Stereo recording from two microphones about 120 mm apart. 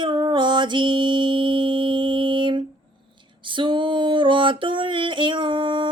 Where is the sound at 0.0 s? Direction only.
40° right (ahead or behind).